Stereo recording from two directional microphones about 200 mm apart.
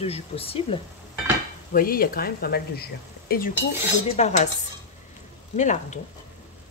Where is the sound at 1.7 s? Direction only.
45° left (ahead or behind).